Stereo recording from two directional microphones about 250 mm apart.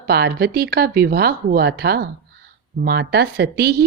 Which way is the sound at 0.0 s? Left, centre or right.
Right.